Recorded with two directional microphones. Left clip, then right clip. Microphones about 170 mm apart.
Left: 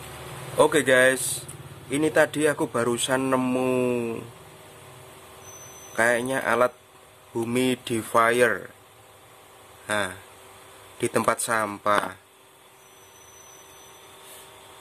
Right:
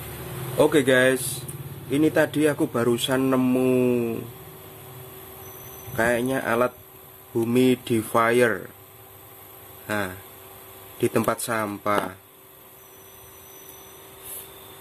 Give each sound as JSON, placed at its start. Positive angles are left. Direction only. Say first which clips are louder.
{"t": 0.6, "sound": "speech", "louder": "even", "side_deg": 15}
{"t": 5.9, "sound": "speech", "louder": "even", "side_deg": 15}
{"t": 9.8, "sound": "speech", "louder": "left 1 dB", "side_deg": 10}